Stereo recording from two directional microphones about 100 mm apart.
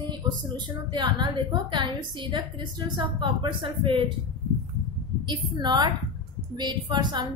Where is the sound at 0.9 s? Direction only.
45° right (ahead or behind).